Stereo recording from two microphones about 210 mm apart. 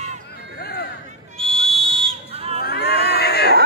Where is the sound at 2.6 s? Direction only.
45° left (ahead or behind).